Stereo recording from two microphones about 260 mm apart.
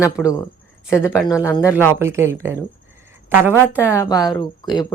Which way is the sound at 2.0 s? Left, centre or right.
Centre.